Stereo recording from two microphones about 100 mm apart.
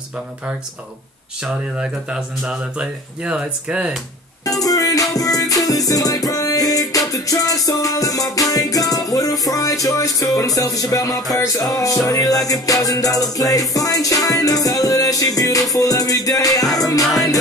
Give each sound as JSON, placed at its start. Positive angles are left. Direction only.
{"t": 1.4, "sound": "speech", "side_deg": -10}
{"t": 4.5, "sound": "music", "side_deg": 35}
{"t": 17.0, "sound": "music", "side_deg": 0}